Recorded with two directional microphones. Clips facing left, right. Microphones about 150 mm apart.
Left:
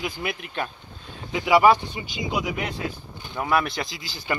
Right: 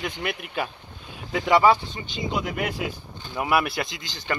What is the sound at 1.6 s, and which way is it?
Speech, 15° left (ahead or behind).